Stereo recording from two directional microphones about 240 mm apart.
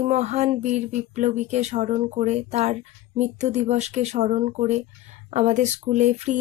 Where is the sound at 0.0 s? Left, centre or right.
Right.